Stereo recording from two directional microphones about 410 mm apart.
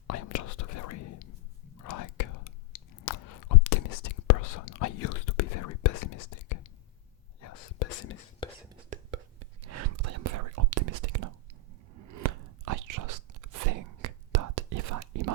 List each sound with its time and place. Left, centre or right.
0.1 s whispering: left
8.4 s a sound: centre
8.9 s whispering: right
9.6 s whispering: right
12.1 s chewing: right